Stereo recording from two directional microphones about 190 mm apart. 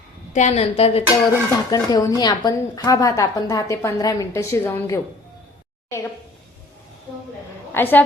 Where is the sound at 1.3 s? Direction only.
20° left (ahead or behind).